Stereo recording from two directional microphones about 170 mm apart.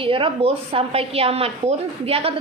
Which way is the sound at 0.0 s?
30° right (ahead or behind).